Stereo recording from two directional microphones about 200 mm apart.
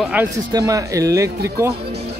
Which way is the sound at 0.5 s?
15° right (ahead or behind).